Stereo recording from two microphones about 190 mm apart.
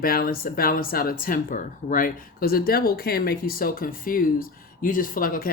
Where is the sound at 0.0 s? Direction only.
50° left (ahead or behind).